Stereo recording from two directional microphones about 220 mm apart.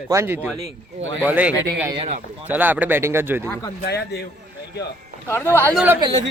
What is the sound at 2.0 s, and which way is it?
Speech, 30° right (ahead or behind).